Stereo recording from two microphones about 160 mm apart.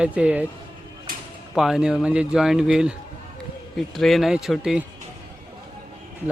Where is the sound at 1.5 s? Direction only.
5° right (ahead or behind).